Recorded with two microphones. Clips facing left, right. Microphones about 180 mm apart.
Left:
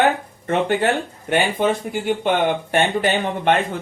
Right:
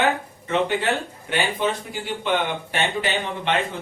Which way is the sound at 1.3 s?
50° left (ahead or behind).